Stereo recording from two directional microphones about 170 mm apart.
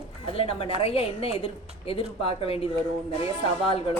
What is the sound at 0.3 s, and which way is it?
A woman's voice, 35° left (ahead or behind).